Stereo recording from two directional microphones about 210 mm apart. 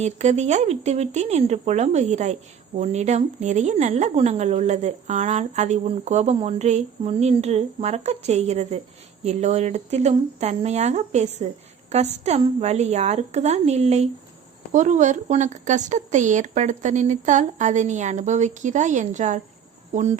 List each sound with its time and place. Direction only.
0.0 s speech: 35° right (ahead or behind)